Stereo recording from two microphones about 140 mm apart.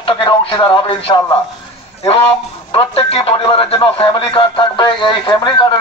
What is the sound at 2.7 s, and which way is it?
A man's voice, 40° left (ahead or behind).